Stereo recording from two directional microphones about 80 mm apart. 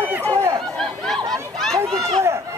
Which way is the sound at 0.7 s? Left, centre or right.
Centre.